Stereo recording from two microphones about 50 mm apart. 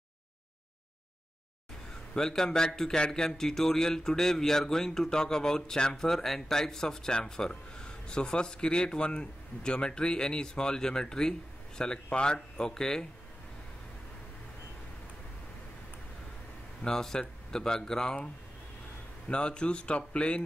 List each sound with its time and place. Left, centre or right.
2.1 s speech: centre
16.8 s speech: centre
19.2 s speech: centre